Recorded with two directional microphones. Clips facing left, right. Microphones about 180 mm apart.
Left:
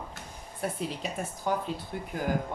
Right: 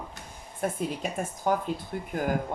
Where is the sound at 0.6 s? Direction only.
50° right (ahead or behind).